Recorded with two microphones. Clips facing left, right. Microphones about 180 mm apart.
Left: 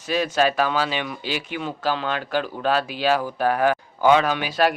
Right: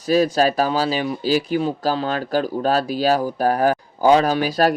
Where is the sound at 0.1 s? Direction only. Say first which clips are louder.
Right 4 dB; 35° right (ahead or behind).